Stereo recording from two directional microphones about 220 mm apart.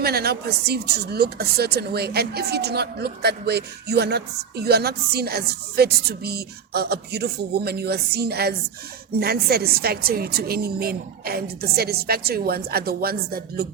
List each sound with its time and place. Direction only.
0.0 s speech: 45° right (ahead or behind)